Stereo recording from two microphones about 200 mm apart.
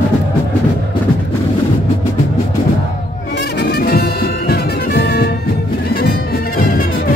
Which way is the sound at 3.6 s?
50° left (ahead or behind).